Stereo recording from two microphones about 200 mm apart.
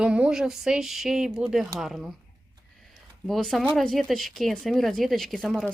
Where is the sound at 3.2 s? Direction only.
Centre (ahead or behind).